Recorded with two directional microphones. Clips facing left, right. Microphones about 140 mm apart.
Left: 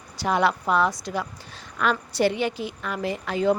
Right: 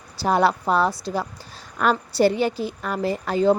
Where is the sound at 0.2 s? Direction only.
35° right (ahead or behind).